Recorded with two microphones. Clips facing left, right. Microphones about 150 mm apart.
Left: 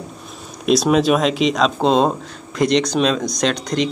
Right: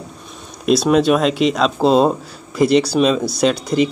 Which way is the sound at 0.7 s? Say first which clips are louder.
Right 1 dB; centre (ahead or behind).